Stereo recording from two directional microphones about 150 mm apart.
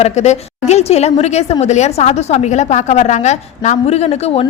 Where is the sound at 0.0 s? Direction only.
50° left (ahead or behind).